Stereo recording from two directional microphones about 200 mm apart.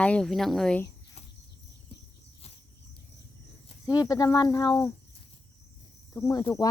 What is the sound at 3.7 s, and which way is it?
Speech, 20° left (ahead or behind).